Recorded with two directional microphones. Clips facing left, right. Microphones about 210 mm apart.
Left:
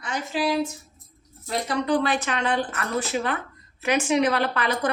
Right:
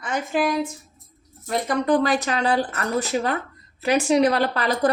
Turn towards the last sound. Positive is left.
turn(degrees=-35)  # may be behind; listen again after turning